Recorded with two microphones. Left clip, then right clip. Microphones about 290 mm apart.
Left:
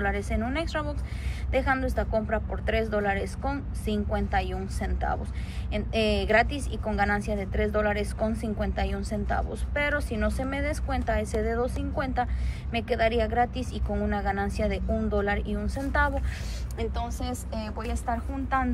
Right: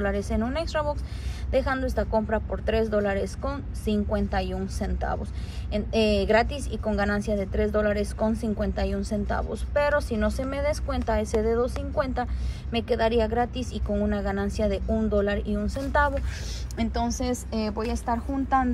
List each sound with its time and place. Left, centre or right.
0.0 s a woman's voice: centre
17.5 s a woman's voice: centre